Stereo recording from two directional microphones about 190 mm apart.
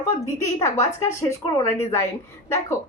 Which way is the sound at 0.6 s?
15° left (ahead or behind).